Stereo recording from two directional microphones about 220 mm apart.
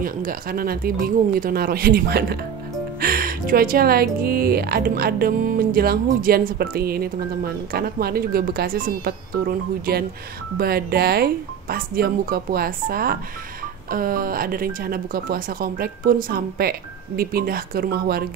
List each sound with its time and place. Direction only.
0.0 s speech: 40° right (ahead or behind)